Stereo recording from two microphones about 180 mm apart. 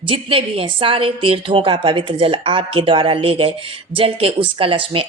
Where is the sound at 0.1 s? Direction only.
30° right (ahead or behind).